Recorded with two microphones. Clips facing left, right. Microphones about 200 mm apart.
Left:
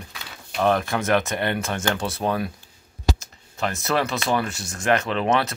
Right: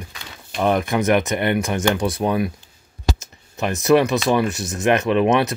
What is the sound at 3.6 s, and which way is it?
Speech, 15° right (ahead or behind).